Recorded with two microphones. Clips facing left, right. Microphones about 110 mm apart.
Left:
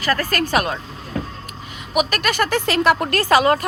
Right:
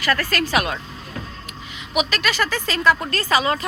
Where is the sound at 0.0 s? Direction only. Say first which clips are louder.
Left 1 dB; 40° left (ahead or behind).